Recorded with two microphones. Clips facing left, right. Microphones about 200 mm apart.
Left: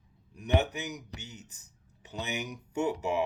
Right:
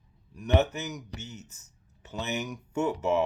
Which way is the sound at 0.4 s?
15° left (ahead or behind).